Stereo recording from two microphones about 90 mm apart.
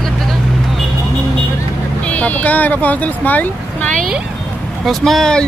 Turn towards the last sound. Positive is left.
turn(degrees=5)  # may be behind; listen again after turning